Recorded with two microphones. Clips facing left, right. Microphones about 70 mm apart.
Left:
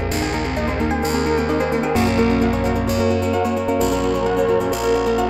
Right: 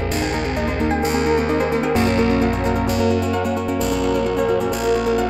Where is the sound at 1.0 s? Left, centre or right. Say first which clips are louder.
Right 1 dB; left.